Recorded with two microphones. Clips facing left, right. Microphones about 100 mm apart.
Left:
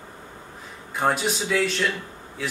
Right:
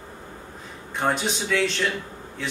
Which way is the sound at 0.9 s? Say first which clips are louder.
Left 1 dB; 5° left (ahead or behind).